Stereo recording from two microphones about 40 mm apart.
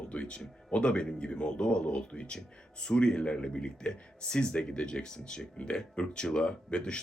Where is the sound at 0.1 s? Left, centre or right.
Left.